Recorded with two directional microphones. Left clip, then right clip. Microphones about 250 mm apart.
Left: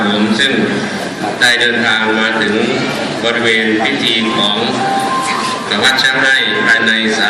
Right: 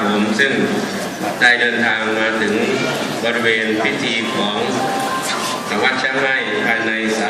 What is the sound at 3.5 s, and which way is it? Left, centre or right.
Speech, right.